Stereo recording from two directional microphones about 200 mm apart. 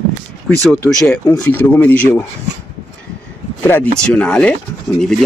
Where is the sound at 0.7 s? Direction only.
5° left (ahead or behind).